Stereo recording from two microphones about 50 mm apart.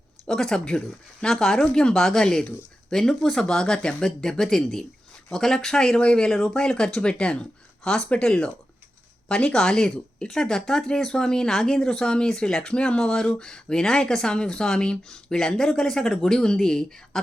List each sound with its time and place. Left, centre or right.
0.3 s speech: centre